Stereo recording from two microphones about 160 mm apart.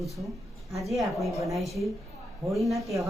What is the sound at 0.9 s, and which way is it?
Speech, centre (ahead or behind).